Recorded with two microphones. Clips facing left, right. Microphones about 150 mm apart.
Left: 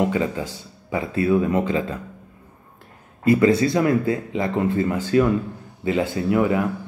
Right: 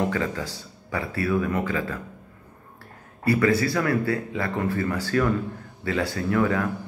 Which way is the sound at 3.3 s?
20° left (ahead or behind).